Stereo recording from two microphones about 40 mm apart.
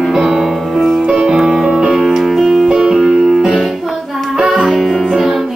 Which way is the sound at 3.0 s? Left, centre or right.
Centre.